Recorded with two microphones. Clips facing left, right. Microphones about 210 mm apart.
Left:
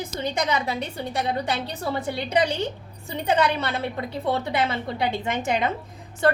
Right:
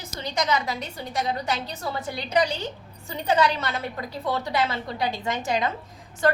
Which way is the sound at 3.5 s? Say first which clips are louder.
Left 3 dB; 30° left (ahead or behind).